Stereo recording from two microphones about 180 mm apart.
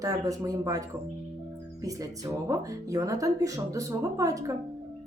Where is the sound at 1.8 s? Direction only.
20° right (ahead or behind).